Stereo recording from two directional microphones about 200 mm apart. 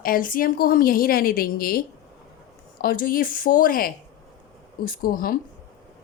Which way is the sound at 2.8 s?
45° left (ahead or behind).